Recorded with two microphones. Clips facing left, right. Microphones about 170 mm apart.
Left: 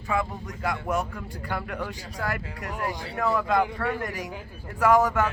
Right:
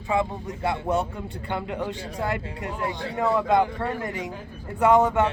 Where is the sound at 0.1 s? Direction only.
25° right (ahead or behind).